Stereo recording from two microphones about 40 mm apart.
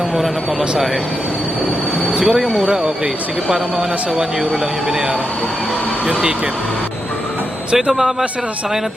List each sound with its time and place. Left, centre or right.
2.1 s speech: centre
2.6 s speech: centre
7.9 s speech: centre